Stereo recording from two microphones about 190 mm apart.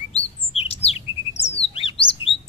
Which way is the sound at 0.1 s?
30° left (ahead or behind).